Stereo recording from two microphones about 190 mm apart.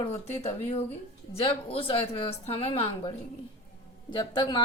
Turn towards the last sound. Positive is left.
turn(degrees=25)  # may be behind; listen again after turning